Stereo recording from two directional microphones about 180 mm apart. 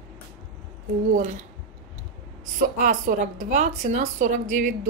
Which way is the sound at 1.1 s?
45° right (ahead or behind).